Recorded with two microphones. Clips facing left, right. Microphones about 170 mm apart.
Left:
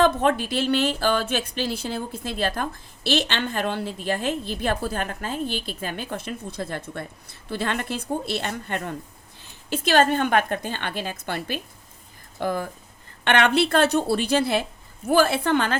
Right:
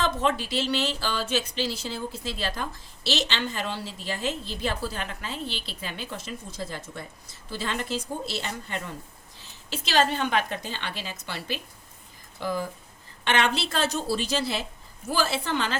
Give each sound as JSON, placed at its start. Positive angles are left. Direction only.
{"t": 0.0, "sound": "a woman's voice", "side_deg": 55}